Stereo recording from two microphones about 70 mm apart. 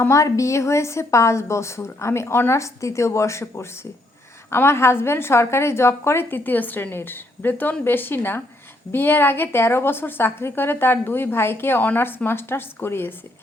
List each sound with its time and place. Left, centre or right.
0.1 s a woman's voice: left